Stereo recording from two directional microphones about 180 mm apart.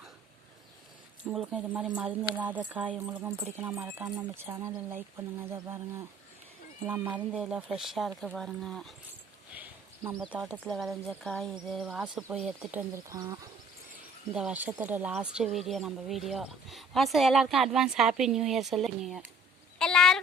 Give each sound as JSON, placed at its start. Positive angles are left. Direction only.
{"t": 1.2, "sound": "speech", "side_deg": -5}
{"t": 6.8, "sound": "speech", "side_deg": -10}
{"t": 9.6, "sound": "speech", "side_deg": -10}
{"t": 12.9, "sound": "speech", "side_deg": -15}
{"t": 14.3, "sound": "speech", "side_deg": -5}
{"t": 19.8, "sound": "a sound", "side_deg": 5}